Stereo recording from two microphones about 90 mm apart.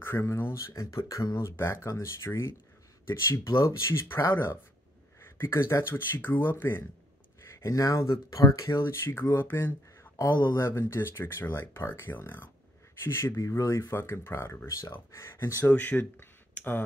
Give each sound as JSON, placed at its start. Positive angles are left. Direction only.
{"t": 0.0, "sound": "speech", "side_deg": 30}
{"t": 15.6, "sound": "speech", "side_deg": 15}